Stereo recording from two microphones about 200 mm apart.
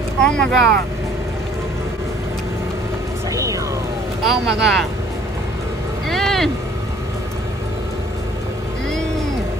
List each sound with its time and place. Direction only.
0.2 s speech: 5° left (ahead or behind)
3.3 s vehicle: 15° right (ahead or behind)
4.2 s speech: centre (ahead or behind)
6.0 s vehicle: centre (ahead or behind)